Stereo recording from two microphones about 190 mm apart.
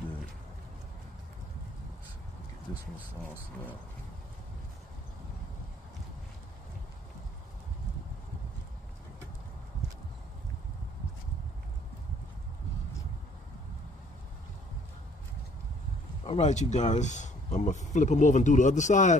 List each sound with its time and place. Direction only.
16.3 s speech: 35° left (ahead or behind)